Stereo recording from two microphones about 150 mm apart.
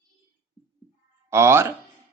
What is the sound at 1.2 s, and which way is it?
Speech, 15° right (ahead or behind).